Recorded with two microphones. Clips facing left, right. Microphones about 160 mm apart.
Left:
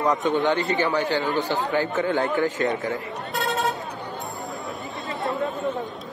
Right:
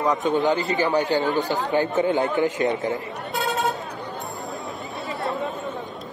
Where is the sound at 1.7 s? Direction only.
20° right (ahead or behind).